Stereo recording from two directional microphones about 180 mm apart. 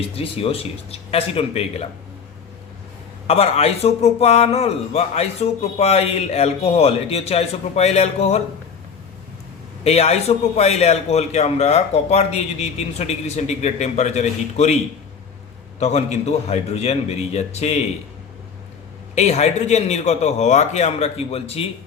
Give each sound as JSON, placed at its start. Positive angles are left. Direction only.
{"t": 0.2, "sound": "a man's voice", "side_deg": 35}
{"t": 3.2, "sound": "a man's voice", "side_deg": 35}
{"t": 9.8, "sound": "a man's voice", "side_deg": 35}
{"t": 15.8, "sound": "a man's voice", "side_deg": 40}
{"t": 19.1, "sound": "a man's voice", "side_deg": 40}